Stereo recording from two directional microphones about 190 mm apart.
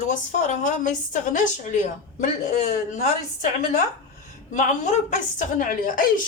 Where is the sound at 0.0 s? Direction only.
40° left (ahead or behind).